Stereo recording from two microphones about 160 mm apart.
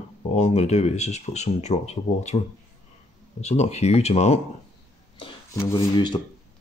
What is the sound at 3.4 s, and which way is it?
Speech, 45° left (ahead or behind).